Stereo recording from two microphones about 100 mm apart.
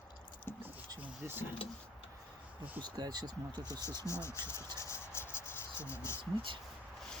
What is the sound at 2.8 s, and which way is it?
Speech, 45° right (ahead or behind).